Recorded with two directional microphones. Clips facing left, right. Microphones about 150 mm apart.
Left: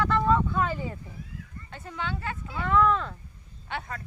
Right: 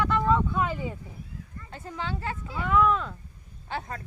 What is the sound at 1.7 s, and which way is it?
Speech, 35° right (ahead or behind).